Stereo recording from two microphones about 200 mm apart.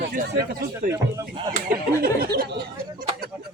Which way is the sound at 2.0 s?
50° right (ahead or behind).